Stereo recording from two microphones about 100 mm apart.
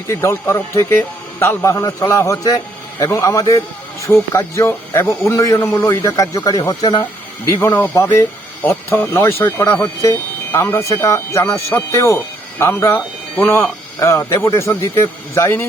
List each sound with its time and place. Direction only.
0.1 s speech: 25° left (ahead or behind)
1.7 s speech: 35° left (ahead or behind)
7.4 s speech: 30° left (ahead or behind)
8.6 s speech: 20° left (ahead or behind)